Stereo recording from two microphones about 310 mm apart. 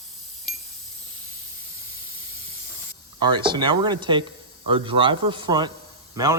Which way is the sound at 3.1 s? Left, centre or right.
Centre.